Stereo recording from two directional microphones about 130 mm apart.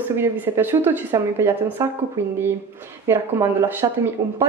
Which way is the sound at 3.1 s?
20° right (ahead or behind).